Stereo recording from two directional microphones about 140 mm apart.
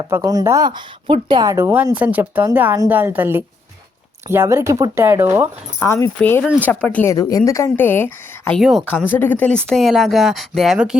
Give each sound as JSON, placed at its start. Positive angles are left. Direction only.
{"t": 0.1, "sound": "speech", "side_deg": -25}
{"t": 5.8, "sound": "speech", "side_deg": 20}
{"t": 6.4, "sound": "speech", "side_deg": -10}
{"t": 6.7, "sound": "speech", "side_deg": 10}
{"t": 7.1, "sound": "speech", "side_deg": 25}
{"t": 8.5, "sound": "speech", "side_deg": 0}
{"t": 8.9, "sound": "speech", "side_deg": 15}
{"t": 9.6, "sound": "speech", "side_deg": 0}